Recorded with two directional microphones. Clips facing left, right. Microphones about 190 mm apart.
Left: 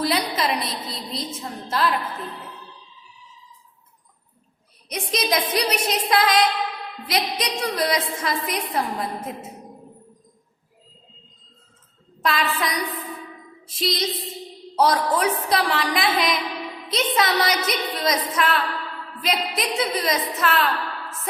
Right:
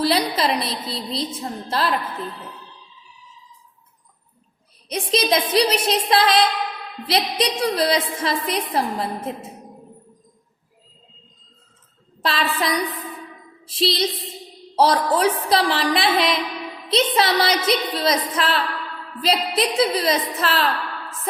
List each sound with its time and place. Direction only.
0.0 s a woman's voice: 35° right (ahead or behind)
4.9 s a woman's voice: 30° right (ahead or behind)
12.2 s a woman's voice: 30° right (ahead or behind)